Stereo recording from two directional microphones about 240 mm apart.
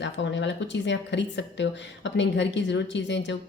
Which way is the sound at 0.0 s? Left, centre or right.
Left.